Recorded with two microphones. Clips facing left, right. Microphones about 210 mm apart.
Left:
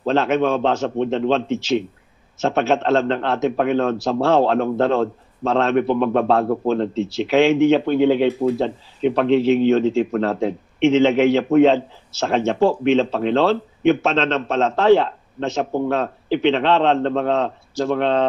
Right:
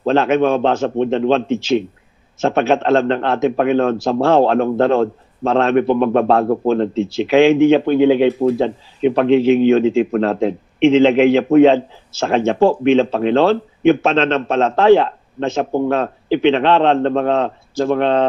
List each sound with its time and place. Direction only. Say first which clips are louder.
0.0 s a man's voice: right 4 dB; 55° right (ahead or behind)
8.4 s a man's voice: right 4 dB; 65° right (ahead or behind)